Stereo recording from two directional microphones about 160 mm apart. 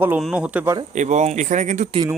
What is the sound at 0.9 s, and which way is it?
Speech, 50° right (ahead or behind).